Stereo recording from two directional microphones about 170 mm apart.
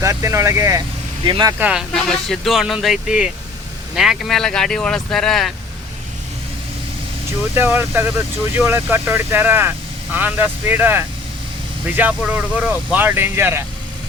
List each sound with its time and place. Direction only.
0.0 s speech: 15° right (ahead or behind)
1.5 s speech: 10° right (ahead or behind)
1.9 s speech: centre (ahead or behind)
7.5 s speech: 15° right (ahead or behind)